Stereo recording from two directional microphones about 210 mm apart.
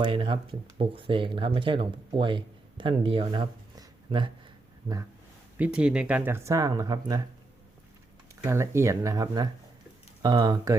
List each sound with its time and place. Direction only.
0.0 s speech: 25° right (ahead or behind)
5.5 s speech: 5° right (ahead or behind)
8.4 s speech: 15° right (ahead or behind)